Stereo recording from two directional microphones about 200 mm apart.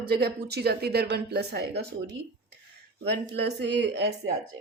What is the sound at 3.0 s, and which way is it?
Speech, 55° right (ahead or behind).